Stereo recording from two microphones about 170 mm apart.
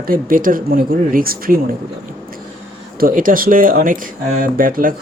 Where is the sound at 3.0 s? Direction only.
55° right (ahead or behind).